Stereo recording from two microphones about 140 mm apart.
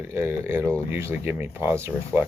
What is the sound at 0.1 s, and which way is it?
Speech, 20° right (ahead or behind).